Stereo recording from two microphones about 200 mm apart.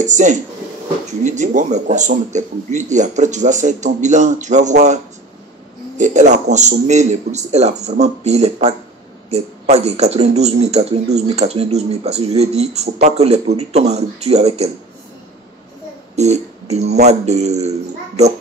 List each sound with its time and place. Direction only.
0.0 s a man's voice: 40° right (ahead or behind)
16.2 s a man's voice: 35° right (ahead or behind)